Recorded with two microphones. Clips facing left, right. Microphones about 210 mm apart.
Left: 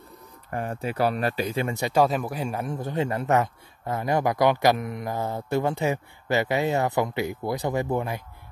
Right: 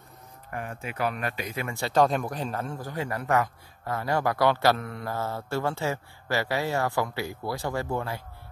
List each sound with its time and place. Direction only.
0.5 s speech: 35° left (ahead or behind); by 8.2 s 20° left (ahead or behind)